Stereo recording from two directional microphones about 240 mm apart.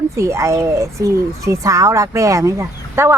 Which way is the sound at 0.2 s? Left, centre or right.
Centre.